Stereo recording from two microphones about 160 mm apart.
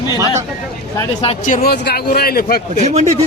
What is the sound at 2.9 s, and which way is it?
Speech, 45° right (ahead or behind).